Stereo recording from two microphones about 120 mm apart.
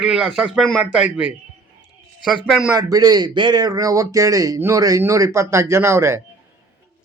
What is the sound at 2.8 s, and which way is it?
Speech, 30° right (ahead or behind).